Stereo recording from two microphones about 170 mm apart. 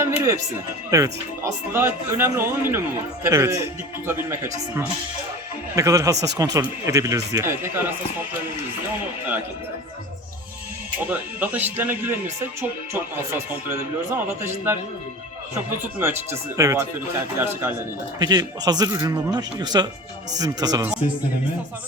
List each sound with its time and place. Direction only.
0.0 s music: 15° right (ahead or behind)
0.9 s speech: 20° right (ahead or behind)
11.1 s speech: 10° right (ahead or behind)
16.0 s speech: 15° right (ahead or behind)
18.2 s speech: 25° right (ahead or behind)